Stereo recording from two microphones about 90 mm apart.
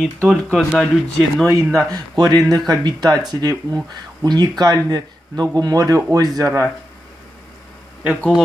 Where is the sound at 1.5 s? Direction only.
40° right (ahead or behind).